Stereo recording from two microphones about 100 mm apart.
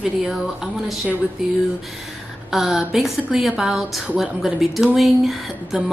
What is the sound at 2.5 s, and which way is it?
A woman's voice, centre (ahead or behind).